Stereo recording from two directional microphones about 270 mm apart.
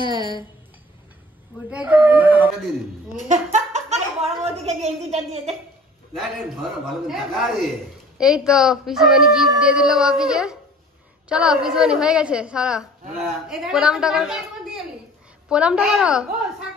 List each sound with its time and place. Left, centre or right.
0.0 s speech: centre
1.7 s speech: centre
3.5 s a woman's voice: right
6.1 s a woman's voice: centre